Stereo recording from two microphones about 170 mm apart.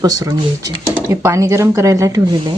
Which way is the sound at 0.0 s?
20° right (ahead or behind).